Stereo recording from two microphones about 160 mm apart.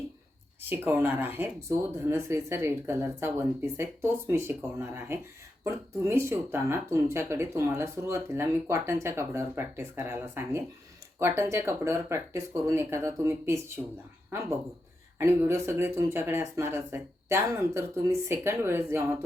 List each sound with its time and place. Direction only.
0.7 s speech: 10° right (ahead or behind)
15.2 s speech: 15° right (ahead or behind)